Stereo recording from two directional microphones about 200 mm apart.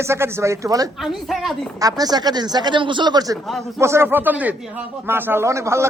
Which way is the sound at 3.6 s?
15° right (ahead or behind).